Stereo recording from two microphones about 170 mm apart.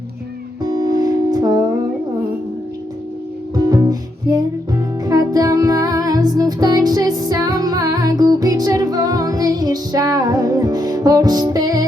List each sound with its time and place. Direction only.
0.6 s music: 20° right (ahead or behind)
3.5 s music: 20° right (ahead or behind)